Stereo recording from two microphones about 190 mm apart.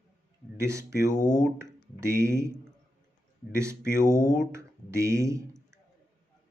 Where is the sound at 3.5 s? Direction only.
15° right (ahead or behind).